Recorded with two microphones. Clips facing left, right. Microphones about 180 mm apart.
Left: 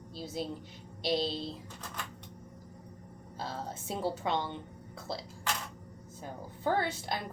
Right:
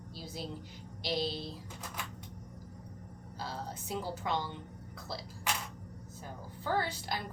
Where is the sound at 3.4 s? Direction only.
25° left (ahead or behind).